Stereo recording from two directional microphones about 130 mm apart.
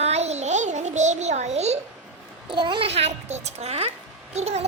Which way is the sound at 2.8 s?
55° right (ahead or behind).